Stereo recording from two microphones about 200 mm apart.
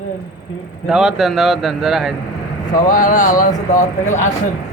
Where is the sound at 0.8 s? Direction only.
Centre (ahead or behind).